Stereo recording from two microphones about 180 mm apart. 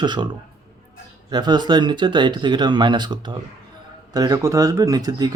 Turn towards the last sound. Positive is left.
turn(degrees=-20)  # may be behind; listen again after turning